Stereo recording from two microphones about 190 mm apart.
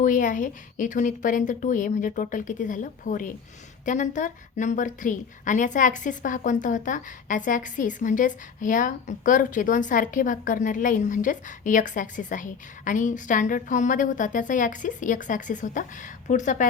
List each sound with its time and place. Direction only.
0.0 s a woman's voice: 45° left (ahead or behind)